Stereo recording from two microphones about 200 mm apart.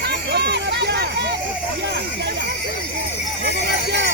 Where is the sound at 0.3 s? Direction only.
55° right (ahead or behind).